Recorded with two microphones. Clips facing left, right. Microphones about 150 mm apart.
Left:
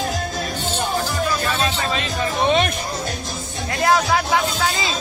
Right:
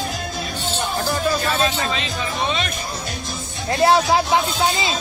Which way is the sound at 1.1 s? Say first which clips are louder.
Right 1 dB; 40° right (ahead or behind).